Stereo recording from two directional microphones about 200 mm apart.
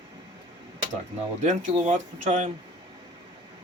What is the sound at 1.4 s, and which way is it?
Speech, 35° right (ahead or behind).